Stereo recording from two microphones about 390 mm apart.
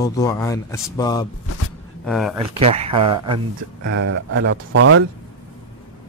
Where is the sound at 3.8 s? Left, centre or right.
Right.